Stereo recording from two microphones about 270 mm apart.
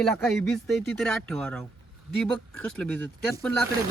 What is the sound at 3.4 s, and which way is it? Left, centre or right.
Speech, centre.